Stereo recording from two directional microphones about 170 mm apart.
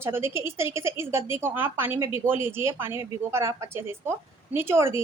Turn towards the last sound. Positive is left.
turn(degrees=-15)  # may be behind; listen again after turning